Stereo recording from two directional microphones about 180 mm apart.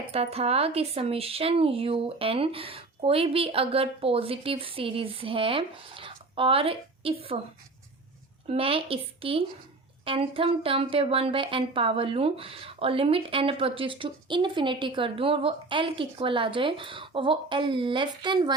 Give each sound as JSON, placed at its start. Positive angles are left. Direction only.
{"t": 0.1, "sound": "speech", "side_deg": -35}
{"t": 8.4, "sound": "a woman's voice", "side_deg": -30}